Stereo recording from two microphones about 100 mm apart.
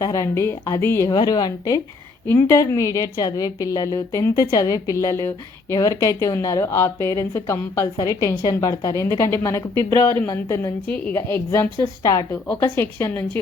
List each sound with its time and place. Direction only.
0.0 s a woman's voice: 30° left (ahead or behind)
1.1 s a woman's voice: 45° left (ahead or behind)
2.2 s a woman's voice: 25° left (ahead or behind)
10.8 s a woman's voice: 10° left (ahead or behind)
11.1 s a woman's voice: 25° left (ahead or behind)